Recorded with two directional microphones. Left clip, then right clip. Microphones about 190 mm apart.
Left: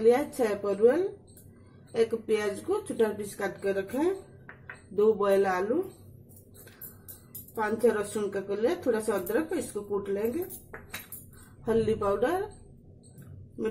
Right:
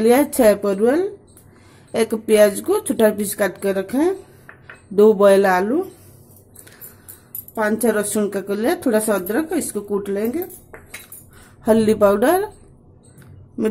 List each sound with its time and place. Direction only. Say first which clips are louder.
0.0 s a woman's voice: right 10 dB; 50° right (ahead or behind)
7.5 s a woman's voice: right 7 dB; 45° right (ahead or behind)
11.6 s a woman's voice: right 12 dB; 50° right (ahead or behind)